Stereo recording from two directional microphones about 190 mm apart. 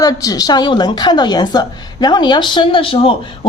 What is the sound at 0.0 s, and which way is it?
A woman's voice, 20° left (ahead or behind).